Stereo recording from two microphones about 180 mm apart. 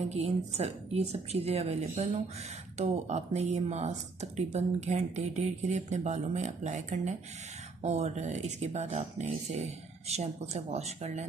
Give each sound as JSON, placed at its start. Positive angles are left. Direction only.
{"t": 0.1, "sound": "speech", "side_deg": -35}